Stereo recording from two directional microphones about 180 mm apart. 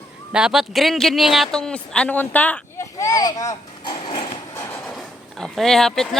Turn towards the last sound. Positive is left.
turn(degrees=0)  # may be behind; listen again after turning